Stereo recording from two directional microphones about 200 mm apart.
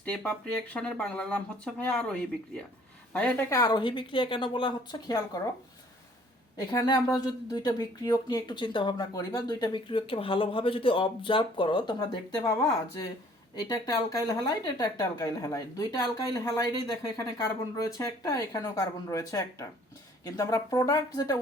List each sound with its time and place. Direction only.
0.0 s speech: 5° left (ahead or behind)
6.6 s speech: 20° left (ahead or behind)
13.6 s speech: 20° left (ahead or behind)